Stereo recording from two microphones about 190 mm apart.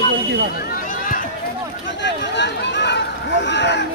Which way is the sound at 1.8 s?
70° left (ahead or behind).